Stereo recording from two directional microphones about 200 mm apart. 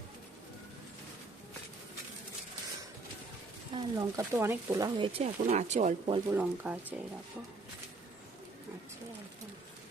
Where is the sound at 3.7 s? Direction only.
20° right (ahead or behind).